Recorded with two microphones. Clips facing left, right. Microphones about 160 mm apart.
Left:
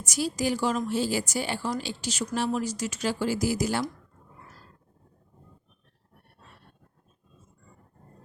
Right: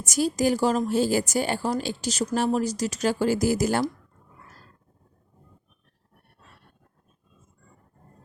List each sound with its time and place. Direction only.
0.0 s speech: 45° right (ahead or behind)